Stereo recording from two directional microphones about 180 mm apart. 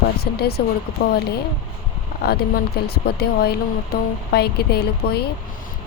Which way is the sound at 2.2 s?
60° left (ahead or behind).